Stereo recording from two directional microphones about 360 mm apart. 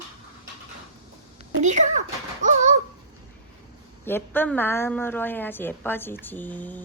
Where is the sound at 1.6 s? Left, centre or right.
Centre.